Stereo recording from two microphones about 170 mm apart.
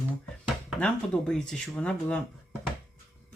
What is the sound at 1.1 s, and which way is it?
Speech, 5° left (ahead or behind).